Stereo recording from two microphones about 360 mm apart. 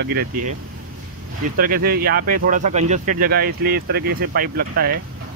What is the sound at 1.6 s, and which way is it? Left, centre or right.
Speech, right.